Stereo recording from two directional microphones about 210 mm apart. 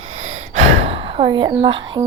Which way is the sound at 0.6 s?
70° right (ahead or behind).